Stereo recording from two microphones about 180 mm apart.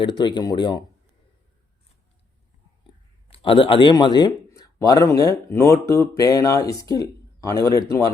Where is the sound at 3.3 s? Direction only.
30° left (ahead or behind).